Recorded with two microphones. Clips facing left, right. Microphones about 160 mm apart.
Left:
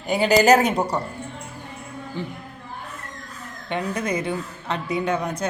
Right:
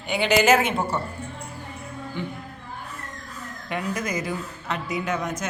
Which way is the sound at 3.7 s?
30° left (ahead or behind).